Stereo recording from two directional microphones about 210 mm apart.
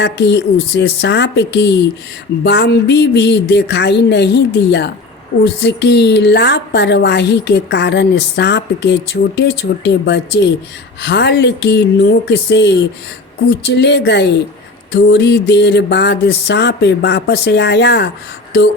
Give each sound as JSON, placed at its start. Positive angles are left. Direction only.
{"t": 0.0, "sound": "a woman's voice", "side_deg": 55}